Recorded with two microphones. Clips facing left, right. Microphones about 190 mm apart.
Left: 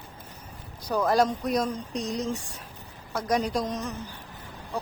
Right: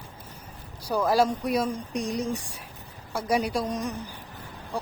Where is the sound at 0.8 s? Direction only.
10° right (ahead or behind).